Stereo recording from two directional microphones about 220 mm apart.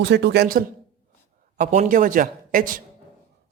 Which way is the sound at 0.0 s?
50° right (ahead or behind).